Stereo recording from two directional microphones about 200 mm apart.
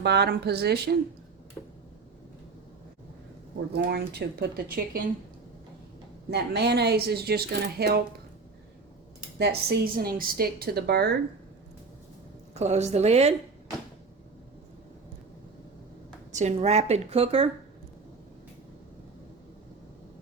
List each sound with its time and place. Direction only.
0.0 s speech: 55° right (ahead or behind)
1.6 s a sound: 10° left (ahead or behind)
3.8 s speech: 55° right (ahead or behind)
6.3 s speech: 55° right (ahead or behind)
9.4 s speech: 55° right (ahead or behind)
12.5 s a woman's voice: 35° right (ahead or behind)
16.3 s a woman's voice: 35° right (ahead or behind)